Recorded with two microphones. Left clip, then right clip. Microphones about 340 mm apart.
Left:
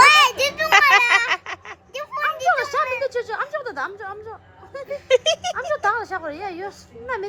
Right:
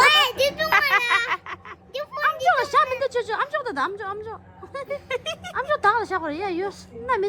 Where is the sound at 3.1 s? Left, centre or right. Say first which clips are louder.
Right 1 dB; right.